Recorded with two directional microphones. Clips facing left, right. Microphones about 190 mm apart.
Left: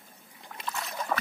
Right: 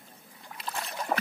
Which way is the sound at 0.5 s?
30° right (ahead or behind).